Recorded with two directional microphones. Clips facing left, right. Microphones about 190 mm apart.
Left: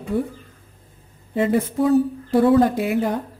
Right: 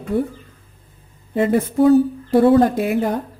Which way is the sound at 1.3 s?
55° right (ahead or behind).